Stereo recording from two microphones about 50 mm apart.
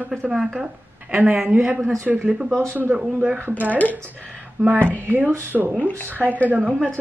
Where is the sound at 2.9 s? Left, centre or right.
Right.